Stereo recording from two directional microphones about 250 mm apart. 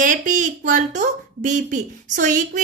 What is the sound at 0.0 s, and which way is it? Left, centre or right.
A woman's voice, right.